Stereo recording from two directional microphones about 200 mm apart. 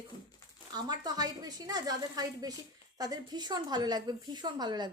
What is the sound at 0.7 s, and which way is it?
A woman's voice, 20° right (ahead or behind).